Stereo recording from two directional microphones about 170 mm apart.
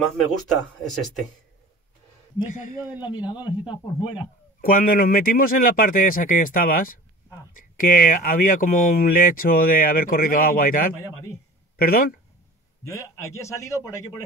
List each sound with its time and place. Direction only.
0.8 s speech: centre (ahead or behind)
2.4 s a man's voice: 50° left (ahead or behind)
3.0 s speech: 25° left (ahead or behind)
4.6 s speech: 55° left (ahead or behind)
12.8 s a man's voice: 15° left (ahead or behind)